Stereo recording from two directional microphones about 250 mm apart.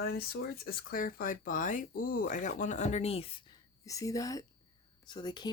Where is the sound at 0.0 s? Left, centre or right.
Left.